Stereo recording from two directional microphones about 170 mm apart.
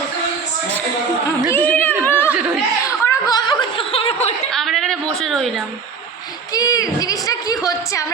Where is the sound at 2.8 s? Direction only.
20° left (ahead or behind).